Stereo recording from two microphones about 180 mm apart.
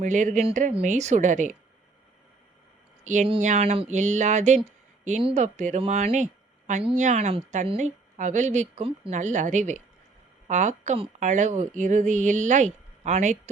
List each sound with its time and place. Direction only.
0.0 s speech: 45° right (ahead or behind)
3.0 s a woman's voice: 45° right (ahead or behind)